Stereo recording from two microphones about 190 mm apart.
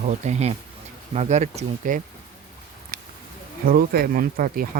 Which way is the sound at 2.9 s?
50° right (ahead or behind).